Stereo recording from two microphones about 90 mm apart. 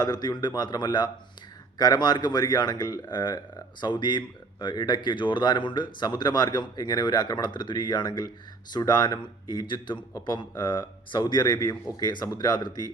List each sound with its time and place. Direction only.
0.0 s speech: 50° left (ahead or behind)